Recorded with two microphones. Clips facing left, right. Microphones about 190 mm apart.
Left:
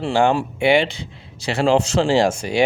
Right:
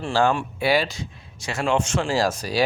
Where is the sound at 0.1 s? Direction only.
20° left (ahead or behind).